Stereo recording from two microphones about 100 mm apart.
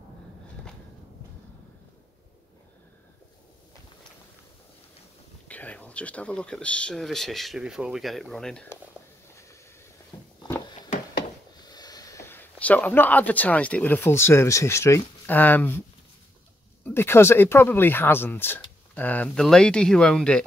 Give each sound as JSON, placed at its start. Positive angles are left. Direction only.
{"t": 5.5, "sound": "speech", "side_deg": 15}
{"t": 10.1, "sound": "a sound", "side_deg": 50}
{"t": 11.6, "sound": "speech", "side_deg": 40}
{"t": 16.8, "sound": "speech", "side_deg": 25}